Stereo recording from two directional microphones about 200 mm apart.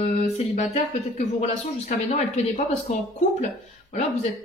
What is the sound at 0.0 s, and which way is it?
Speech, 35° left (ahead or behind).